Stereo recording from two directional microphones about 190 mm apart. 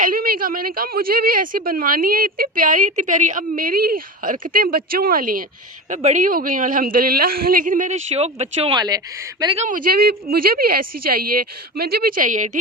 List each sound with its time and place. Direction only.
0.0 s a woman's voice: 50° right (ahead or behind); by 9.5 s 15° right (ahead or behind)
9.6 s a woman's voice: 45° right (ahead or behind)